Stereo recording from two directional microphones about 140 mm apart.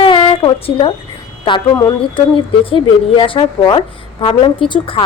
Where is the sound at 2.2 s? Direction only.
40° left (ahead or behind).